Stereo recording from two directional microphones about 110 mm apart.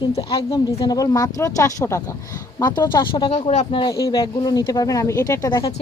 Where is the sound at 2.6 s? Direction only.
40° left (ahead or behind).